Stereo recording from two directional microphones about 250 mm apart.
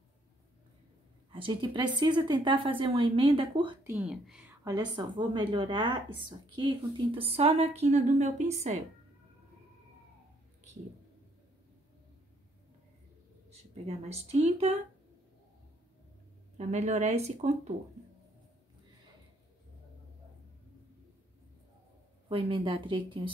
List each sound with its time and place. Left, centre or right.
1.3 s a woman's voice: centre
3.9 s a woman's voice: centre; by 8.7 s right
13.5 s speech: right
16.5 s a woman's voice: right
22.3 s a woman's voice: right